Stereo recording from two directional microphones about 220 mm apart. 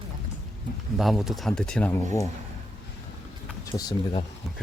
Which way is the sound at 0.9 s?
Centre (ahead or behind).